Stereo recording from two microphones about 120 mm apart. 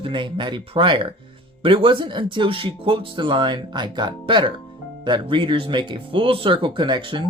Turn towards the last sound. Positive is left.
turn(degrees=-40)  # may be behind; listen again after turning